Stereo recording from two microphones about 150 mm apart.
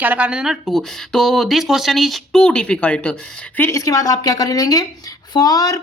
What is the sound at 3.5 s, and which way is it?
A woman's voice, 20° left (ahead or behind).